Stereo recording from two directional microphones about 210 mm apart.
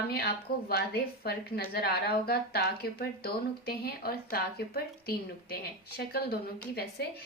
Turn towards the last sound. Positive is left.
turn(degrees=50)  # may be behind; listen again after turning